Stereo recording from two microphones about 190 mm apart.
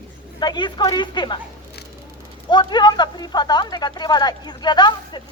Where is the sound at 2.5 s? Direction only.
25° left (ahead or behind).